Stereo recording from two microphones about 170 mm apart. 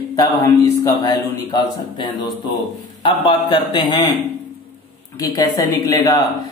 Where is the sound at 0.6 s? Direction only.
20° left (ahead or behind).